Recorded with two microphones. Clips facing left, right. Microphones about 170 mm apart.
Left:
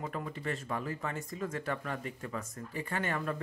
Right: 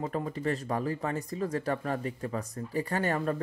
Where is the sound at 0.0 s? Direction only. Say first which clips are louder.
Right 6 dB; 35° right (ahead or behind).